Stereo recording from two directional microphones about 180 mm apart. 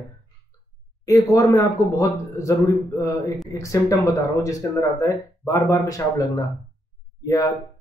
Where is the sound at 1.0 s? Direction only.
20° left (ahead or behind).